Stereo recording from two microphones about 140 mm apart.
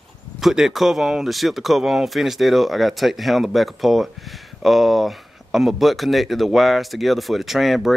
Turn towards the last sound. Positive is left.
turn(degrees=0)  # may be behind; listen again after turning